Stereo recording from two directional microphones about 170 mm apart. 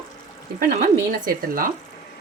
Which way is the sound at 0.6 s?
55° right (ahead or behind).